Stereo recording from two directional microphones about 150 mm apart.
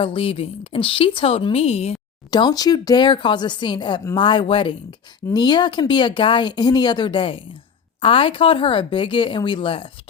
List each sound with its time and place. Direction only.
0.0 s speech: 40° left (ahead or behind)
2.3 s speech: 25° left (ahead or behind)